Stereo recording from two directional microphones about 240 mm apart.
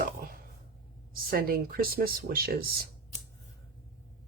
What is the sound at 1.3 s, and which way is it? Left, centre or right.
Speech, right.